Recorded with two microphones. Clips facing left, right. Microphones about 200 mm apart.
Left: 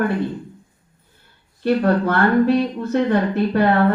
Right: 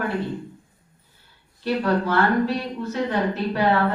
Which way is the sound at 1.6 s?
55° left (ahead or behind).